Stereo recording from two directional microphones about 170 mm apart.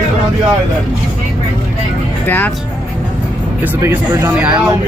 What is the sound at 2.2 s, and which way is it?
Speech, 10° left (ahead or behind).